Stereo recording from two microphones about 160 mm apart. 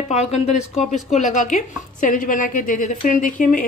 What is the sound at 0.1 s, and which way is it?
A woman's voice, 40° left (ahead or behind).